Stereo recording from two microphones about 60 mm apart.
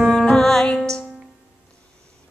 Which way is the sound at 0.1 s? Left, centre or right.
Centre.